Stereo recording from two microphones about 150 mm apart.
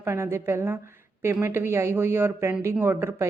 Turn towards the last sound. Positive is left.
turn(degrees=-15)  # may be behind; listen again after turning